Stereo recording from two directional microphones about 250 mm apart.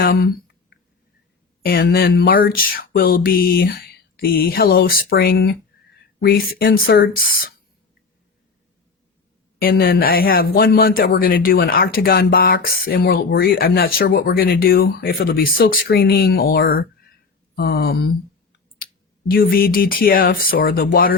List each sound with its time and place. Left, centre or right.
0.0 s a sound: left
1.6 s speech: left
9.6 s speech: left
19.3 s speech: left